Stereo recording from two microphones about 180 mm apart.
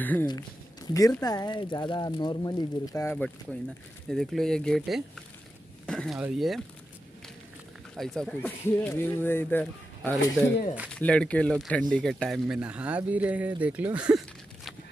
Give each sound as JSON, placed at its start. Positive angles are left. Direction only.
{"t": 0.0, "sound": "speech", "side_deg": 10}
{"t": 0.9, "sound": "speech", "side_deg": 20}
{"t": 4.1, "sound": "speech", "side_deg": 0}
{"t": 5.9, "sound": "a sound", "side_deg": 5}
{"t": 6.1, "sound": "speech", "side_deg": -5}
{"t": 8.0, "sound": "speech", "side_deg": 5}